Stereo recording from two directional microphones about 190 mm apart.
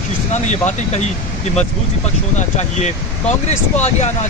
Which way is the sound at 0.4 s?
35° left (ahead or behind).